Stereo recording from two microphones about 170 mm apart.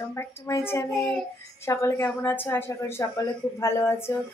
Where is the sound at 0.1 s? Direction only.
15° left (ahead or behind).